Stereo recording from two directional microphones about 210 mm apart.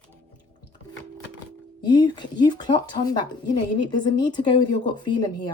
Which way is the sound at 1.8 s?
20° left (ahead or behind).